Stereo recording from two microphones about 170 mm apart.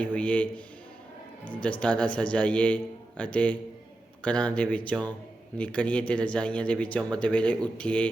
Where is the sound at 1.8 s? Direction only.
5° left (ahead or behind).